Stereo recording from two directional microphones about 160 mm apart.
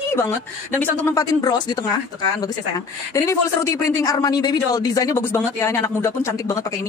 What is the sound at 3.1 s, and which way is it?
Speech, 20° left (ahead or behind).